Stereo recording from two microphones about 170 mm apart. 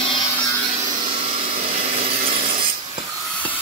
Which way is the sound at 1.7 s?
35° right (ahead or behind).